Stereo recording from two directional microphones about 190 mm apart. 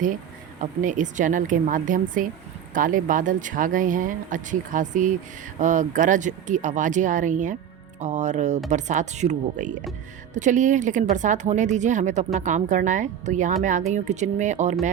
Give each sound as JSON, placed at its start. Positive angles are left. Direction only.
{"t": 0.6, "sound": "a woman's voice", "side_deg": -40}